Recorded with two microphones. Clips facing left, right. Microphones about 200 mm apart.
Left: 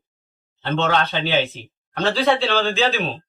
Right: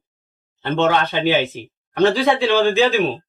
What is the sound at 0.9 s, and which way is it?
A man's voice, 15° right (ahead or behind).